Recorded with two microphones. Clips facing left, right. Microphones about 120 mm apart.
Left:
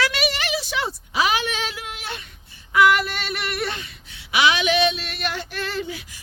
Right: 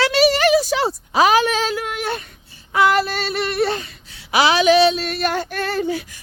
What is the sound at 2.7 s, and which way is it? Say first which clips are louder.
Child singing: right 1 dB; 30° right (ahead or behind).